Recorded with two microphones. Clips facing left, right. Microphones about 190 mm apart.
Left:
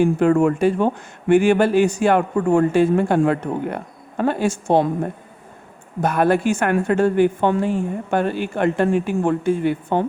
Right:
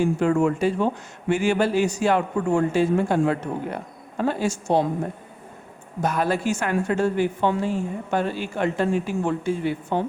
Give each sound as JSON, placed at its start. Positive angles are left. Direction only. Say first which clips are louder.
{"t": 0.0, "sound": "a woman's voice", "louder": "left 4 dB", "side_deg": 55}
{"t": 6.0, "sound": "a woman's voice", "louder": "left 6 dB", "side_deg": 55}